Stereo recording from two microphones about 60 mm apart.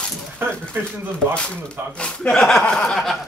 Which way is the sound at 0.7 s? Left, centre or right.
Right.